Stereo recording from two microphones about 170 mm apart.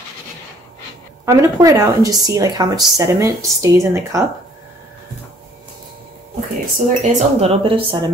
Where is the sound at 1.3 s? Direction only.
20° right (ahead or behind).